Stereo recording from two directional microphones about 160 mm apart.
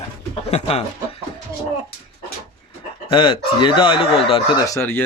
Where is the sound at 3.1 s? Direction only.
30° left (ahead or behind).